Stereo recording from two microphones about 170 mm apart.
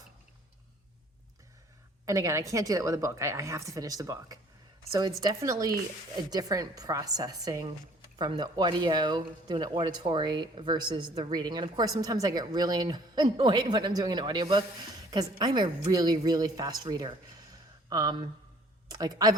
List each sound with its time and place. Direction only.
2.0 s speech: 20° right (ahead or behind)